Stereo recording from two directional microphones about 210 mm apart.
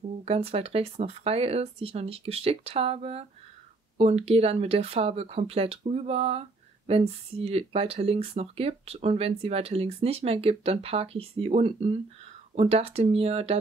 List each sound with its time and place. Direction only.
0.2 s speech: 30° right (ahead or behind)